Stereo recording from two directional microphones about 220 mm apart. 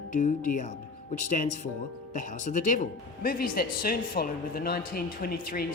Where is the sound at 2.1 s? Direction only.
35° left (ahead or behind).